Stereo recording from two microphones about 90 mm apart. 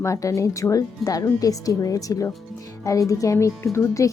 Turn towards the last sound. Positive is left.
turn(degrees=35)  # may be behind; listen again after turning